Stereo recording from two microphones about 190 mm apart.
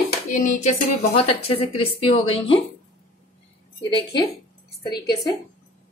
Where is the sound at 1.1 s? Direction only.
30° left (ahead or behind).